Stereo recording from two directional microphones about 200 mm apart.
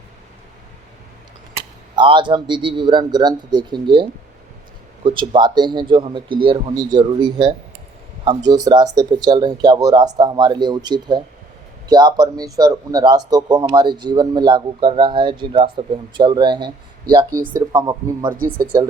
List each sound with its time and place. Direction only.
2.0 s speech: 25° right (ahead or behind)
5.0 s speech: 25° right (ahead or behind)
18.3 s speech: 45° right (ahead or behind)
18.6 s speech: 20° right (ahead or behind)